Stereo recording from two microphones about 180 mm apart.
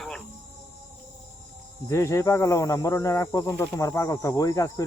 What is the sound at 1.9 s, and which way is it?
Speech, 15° left (ahead or behind).